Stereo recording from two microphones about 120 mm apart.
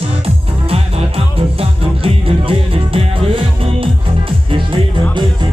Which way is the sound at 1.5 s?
50° right (ahead or behind).